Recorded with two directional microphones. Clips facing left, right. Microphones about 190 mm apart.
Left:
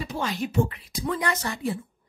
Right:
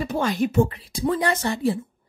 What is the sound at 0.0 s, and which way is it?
Speech, 50° right (ahead or behind).